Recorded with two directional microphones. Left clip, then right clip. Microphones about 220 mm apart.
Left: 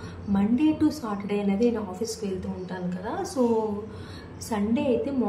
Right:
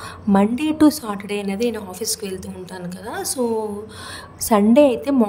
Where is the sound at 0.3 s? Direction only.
50° right (ahead or behind).